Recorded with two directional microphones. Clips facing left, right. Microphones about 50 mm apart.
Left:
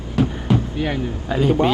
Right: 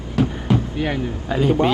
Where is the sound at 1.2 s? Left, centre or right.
Centre.